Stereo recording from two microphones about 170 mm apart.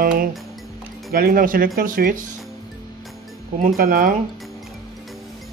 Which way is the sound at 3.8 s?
55° right (ahead or behind).